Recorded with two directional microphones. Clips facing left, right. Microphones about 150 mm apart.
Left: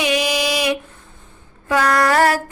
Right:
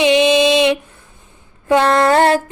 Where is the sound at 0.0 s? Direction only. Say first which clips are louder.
Right 8 dB; 25° right (ahead or behind).